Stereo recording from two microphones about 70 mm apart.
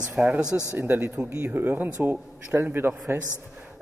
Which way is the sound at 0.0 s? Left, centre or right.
Centre.